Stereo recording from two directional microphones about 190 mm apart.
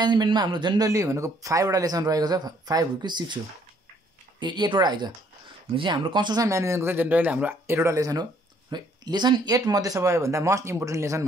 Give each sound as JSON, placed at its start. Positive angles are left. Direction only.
{"t": 0.0, "sound": "a man's voice", "side_deg": -25}
{"t": 4.4, "sound": "a man's voice", "side_deg": -25}